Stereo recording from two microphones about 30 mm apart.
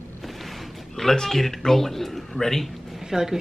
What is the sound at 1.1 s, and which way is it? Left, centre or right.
Speech, centre.